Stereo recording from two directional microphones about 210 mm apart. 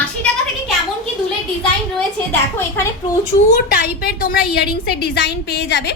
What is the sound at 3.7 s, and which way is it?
A woman's voice, 45° left (ahead or behind).